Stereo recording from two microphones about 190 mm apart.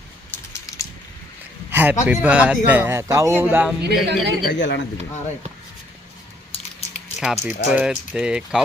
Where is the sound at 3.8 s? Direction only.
60° right (ahead or behind).